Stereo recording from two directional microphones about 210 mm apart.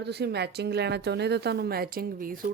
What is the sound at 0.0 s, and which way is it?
Speech, 50° right (ahead or behind).